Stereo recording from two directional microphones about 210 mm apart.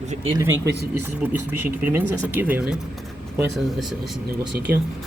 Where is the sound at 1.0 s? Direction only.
10° right (ahead or behind).